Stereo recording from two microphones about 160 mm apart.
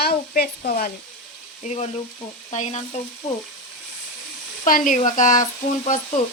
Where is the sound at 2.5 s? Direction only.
45° left (ahead or behind).